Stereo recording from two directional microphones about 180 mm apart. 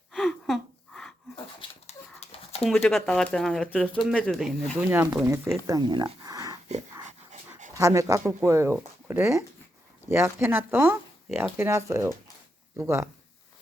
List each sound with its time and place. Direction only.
0.1 s gasp: centre (ahead or behind)
1.9 s dog: 35° left (ahead or behind)
2.6 s speech: centre (ahead or behind)
4.9 s speech: 10° right (ahead or behind)
5.6 s a sound: 20° right (ahead or behind)
7.7 s speech: 20° right (ahead or behind)